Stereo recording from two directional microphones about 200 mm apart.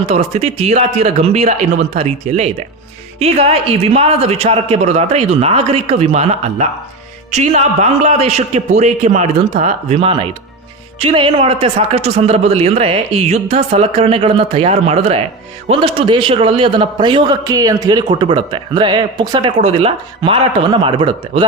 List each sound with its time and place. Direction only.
0.1 s a man's voice: 30° right (ahead or behind)